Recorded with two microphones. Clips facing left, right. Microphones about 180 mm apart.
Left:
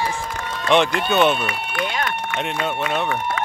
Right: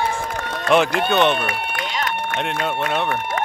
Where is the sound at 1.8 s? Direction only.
55° left (ahead or behind).